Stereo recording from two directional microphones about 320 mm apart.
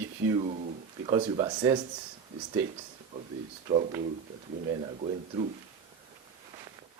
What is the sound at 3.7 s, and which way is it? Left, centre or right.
Speech, centre.